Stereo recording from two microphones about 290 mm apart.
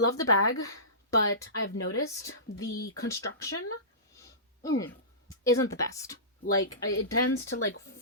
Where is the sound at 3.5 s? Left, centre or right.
Left.